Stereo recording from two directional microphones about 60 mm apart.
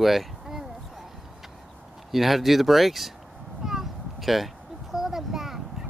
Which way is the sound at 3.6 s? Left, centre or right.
Centre.